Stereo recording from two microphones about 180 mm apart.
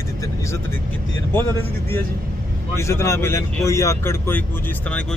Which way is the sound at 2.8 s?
15° left (ahead or behind).